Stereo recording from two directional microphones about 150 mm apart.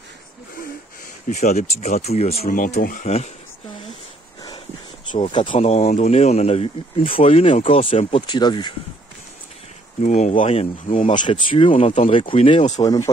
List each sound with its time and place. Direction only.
1.3 s speech: 55° left (ahead or behind)
2.4 s speech: 60° left (ahead or behind)
5.3 s speech: 35° left (ahead or behind)
10.0 s speech: 55° left (ahead or behind)
12.8 s speech: 25° left (ahead or behind)